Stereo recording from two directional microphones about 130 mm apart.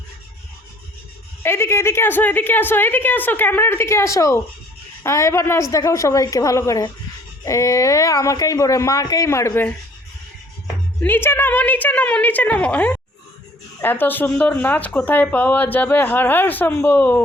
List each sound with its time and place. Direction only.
1.4 s speech: 20° left (ahead or behind)
11.0 s speech: 15° left (ahead or behind)